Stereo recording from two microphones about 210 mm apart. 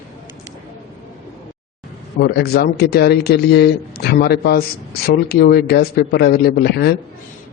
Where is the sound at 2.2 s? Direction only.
50° left (ahead or behind).